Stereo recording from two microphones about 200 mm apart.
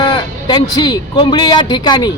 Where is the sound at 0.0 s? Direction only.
20° left (ahead or behind).